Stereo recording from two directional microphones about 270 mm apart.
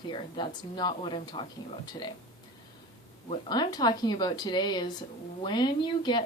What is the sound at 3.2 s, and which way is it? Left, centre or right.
Speech, centre.